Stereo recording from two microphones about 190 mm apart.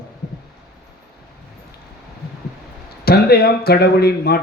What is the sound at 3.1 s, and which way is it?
A man's voice, 55° left (ahead or behind).